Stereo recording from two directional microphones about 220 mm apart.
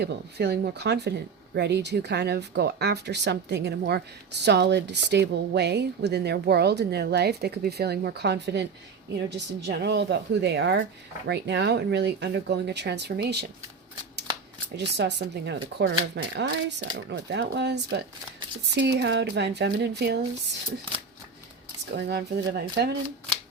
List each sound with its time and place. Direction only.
0.0 s speech: 50° right (ahead or behind)
14.8 s speech: 50° right (ahead or behind)
21.9 s speech: 50° right (ahead or behind)